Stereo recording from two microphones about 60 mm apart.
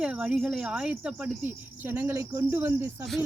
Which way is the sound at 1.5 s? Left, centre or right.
Right.